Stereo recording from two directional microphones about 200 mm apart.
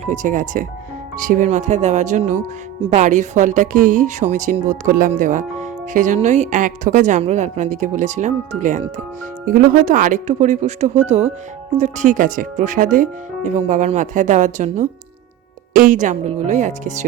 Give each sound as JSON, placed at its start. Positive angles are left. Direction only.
{"t": 0.0, "sound": "speech", "side_deg": -35}